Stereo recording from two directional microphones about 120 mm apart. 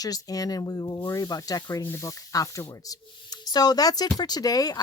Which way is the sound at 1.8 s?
20° left (ahead or behind).